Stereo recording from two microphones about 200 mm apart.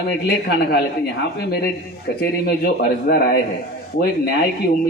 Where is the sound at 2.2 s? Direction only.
50° left (ahead or behind).